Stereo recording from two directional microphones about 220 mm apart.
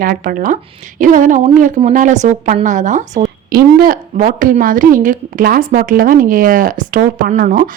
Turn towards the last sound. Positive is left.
turn(degrees=-40)  # may be behind; listen again after turning